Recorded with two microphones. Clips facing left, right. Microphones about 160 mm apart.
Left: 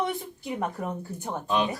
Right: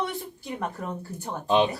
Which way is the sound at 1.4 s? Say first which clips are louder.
Right 5 dB; 25° right (ahead or behind).